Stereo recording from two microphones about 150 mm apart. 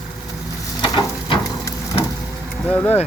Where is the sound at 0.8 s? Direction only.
30° left (ahead or behind).